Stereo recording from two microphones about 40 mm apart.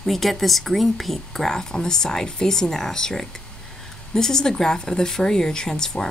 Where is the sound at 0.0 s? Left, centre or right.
Centre.